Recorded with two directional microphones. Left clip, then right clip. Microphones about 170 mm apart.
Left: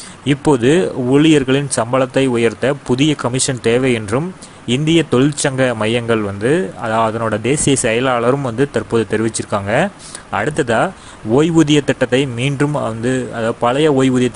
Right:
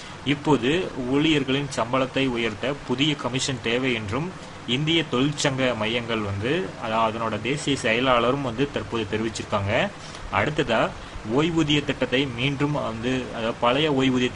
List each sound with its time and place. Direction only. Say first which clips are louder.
0.2 s a man's voice: left 8 dB; 45° left (ahead or behind)